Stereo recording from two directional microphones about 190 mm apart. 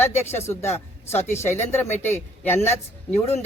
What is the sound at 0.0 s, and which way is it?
Speech, 10° left (ahead or behind).